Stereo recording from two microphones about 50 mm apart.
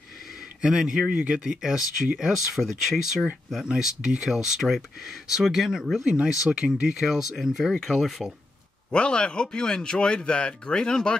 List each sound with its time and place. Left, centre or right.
0.6 s speech: centre
3.6 s speech: centre
7.0 s speech: centre
8.9 s speech: left